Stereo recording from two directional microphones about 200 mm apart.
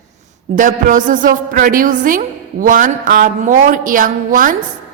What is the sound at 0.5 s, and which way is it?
A woman's voice, 40° right (ahead or behind).